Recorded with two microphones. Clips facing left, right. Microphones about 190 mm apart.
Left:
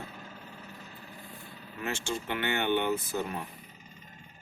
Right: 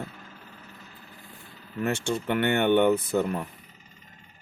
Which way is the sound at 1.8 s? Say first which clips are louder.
Right 7 dB; 60° right (ahead or behind).